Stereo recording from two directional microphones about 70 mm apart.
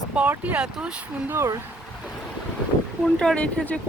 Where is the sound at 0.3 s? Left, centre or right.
Right.